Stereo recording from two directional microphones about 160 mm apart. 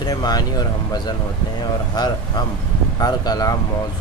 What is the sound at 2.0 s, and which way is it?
Speech, 25° left (ahead or behind).